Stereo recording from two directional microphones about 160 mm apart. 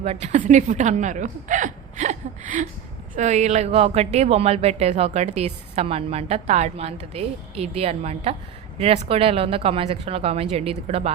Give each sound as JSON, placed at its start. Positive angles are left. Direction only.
{"t": 0.0, "sound": "a woman's voice", "side_deg": -40}